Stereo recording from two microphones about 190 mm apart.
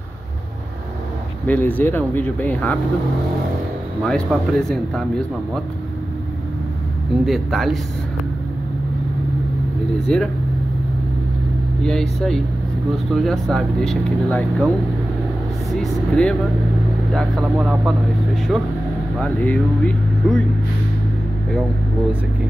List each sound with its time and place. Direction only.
1.5 s speech: 10° left (ahead or behind)
4.0 s speech: 5° left (ahead or behind)
7.2 s speech: centre (ahead or behind)
10.0 s speech: 5° left (ahead or behind)
11.8 s speech: 5° left (ahead or behind)
15.7 s speech: 5° left (ahead or behind)